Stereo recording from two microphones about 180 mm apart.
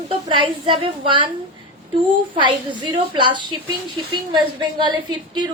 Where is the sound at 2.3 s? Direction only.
25° right (ahead or behind).